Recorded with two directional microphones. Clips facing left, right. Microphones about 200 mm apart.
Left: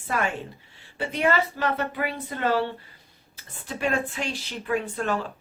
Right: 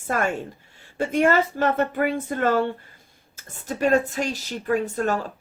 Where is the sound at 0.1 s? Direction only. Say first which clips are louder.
Right 3 dB; 45° right (ahead or behind).